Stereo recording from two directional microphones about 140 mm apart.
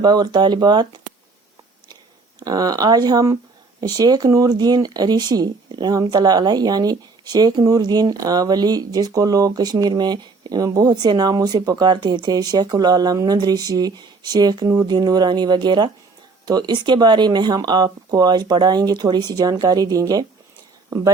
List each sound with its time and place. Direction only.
0.0 s speech: 30° right (ahead or behind)
2.4 s speech: 25° right (ahead or behind)